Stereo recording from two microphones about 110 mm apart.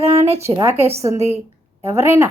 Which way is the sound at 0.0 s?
70° right (ahead or behind).